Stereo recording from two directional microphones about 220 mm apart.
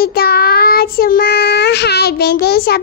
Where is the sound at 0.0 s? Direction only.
45° left (ahead or behind).